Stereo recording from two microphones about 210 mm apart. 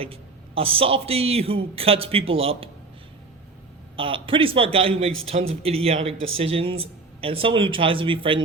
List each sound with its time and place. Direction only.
0.0 s speech: 25° right (ahead or behind)
3.9 s speech: 25° right (ahead or behind)